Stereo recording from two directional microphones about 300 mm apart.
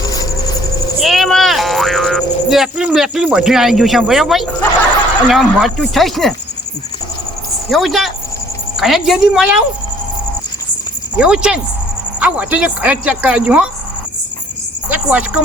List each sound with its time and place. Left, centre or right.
1.0 s music: centre
5.3 s speech: centre
7.7 s speech: centre
11.2 s speech: centre
14.8 s music: centre